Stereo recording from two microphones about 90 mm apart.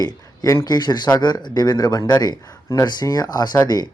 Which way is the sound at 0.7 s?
55° left (ahead or behind).